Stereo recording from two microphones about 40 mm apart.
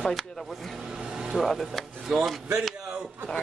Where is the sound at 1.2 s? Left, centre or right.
Centre.